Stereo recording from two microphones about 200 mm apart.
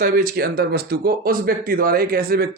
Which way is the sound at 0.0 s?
45° right (ahead or behind).